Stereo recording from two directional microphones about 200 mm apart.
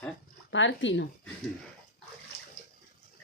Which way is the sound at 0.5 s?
65° left (ahead or behind).